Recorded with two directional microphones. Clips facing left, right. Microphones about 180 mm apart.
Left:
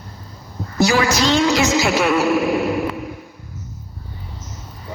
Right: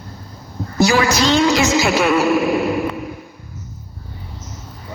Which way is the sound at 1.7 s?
85° right.